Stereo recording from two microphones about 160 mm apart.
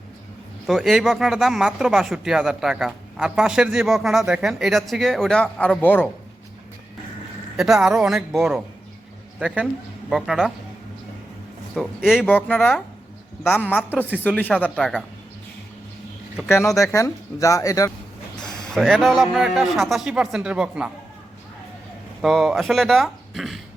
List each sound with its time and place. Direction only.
0.7 s speech: centre (ahead or behind)
7.5 s speech: centre (ahead or behind)
10.1 s speech: centre (ahead or behind)
11.7 s speech: 5° right (ahead or behind)
12.2 s speech: 10° left (ahead or behind)
12.5 s speech: centre (ahead or behind)
14.3 s speech: 10° left (ahead or behind)
16.7 s speech: 20° left (ahead or behind)
18.4 s speech: centre (ahead or behind)
22.2 s speech: centre (ahead or behind)